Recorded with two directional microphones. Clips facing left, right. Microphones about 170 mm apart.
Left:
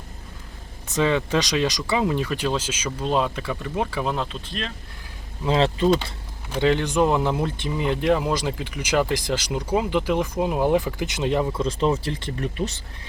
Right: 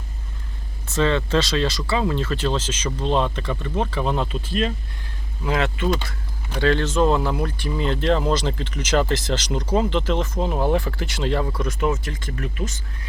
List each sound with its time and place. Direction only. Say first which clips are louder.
0.9 s speech: right 1 dB; 15° left (ahead or behind); by 4.7 s 5° right (ahead or behind)
5.5 s speech: left 3 dB; 30° left (ahead or behind)
6.6 s speech: even; 15° left (ahead or behind); by 12.7 s 35° left (ahead or behind)